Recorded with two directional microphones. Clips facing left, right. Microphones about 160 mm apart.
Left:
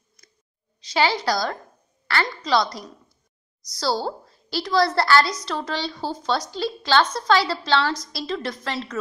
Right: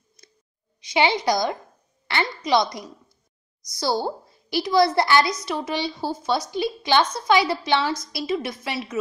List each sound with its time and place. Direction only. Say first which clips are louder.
0.8 s a woman's voice: right 1 dB; 20° right (ahead or behind)